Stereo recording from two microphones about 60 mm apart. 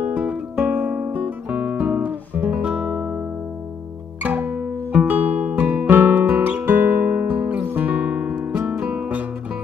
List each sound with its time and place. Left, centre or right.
0.0 s music: centre
0.7 s guitar: right
4.2 s music: right